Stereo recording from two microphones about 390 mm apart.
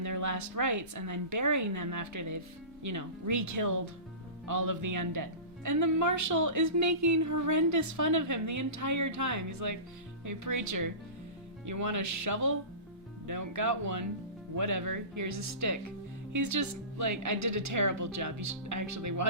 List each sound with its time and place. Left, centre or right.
0.0 s speech: right